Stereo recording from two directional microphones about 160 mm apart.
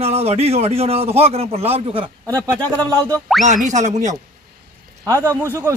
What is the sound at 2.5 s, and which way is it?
Speech, 10° left (ahead or behind).